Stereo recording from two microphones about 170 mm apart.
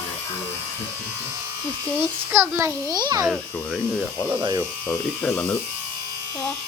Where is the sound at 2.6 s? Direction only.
20° right (ahead or behind).